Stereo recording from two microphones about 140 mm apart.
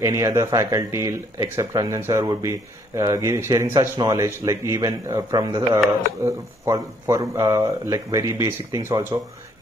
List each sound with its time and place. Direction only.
0.0 s speech: 25° right (ahead or behind)